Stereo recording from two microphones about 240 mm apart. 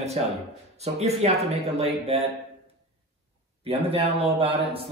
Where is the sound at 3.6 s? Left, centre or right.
Right.